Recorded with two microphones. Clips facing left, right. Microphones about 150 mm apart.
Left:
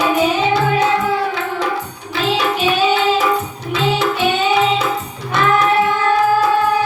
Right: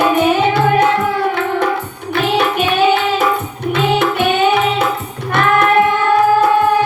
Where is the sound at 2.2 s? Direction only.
55° right (ahead or behind).